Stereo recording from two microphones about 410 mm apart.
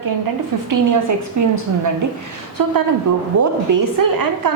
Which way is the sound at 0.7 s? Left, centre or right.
Right.